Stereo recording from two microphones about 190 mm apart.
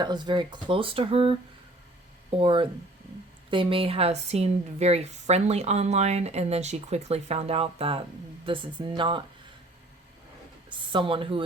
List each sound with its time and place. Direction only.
0.0 s a woman's voice: 25° right (ahead or behind)
10.7 s speech: 25° right (ahead or behind)